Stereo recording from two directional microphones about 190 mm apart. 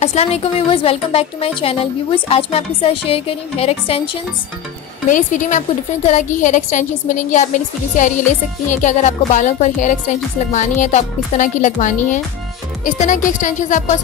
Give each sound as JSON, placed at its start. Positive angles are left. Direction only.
{"t": 0.0, "sound": "speech", "side_deg": 35}
{"t": 5.0, "sound": "speech", "side_deg": 45}